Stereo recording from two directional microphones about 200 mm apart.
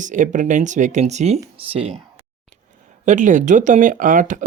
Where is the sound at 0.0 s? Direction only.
40° right (ahead or behind).